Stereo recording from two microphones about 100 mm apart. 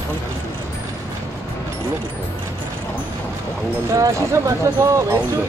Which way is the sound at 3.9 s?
30° right (ahead or behind).